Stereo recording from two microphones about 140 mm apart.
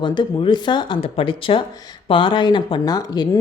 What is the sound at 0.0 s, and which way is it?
A woman's voice, 35° left (ahead or behind).